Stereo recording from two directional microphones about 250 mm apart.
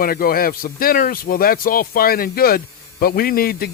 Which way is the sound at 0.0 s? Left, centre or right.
Left.